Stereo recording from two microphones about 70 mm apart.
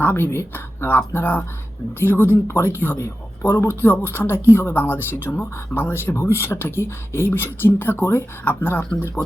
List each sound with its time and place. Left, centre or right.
0.0 s speech: left
0.3 s speech: left